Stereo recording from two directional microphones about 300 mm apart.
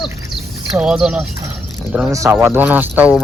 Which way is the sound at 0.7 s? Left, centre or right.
Centre.